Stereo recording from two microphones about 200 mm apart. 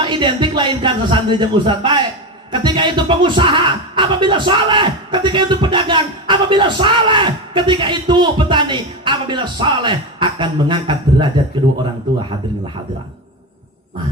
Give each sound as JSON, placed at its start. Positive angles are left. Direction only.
{"t": 0.0, "sound": "speech", "side_deg": -25}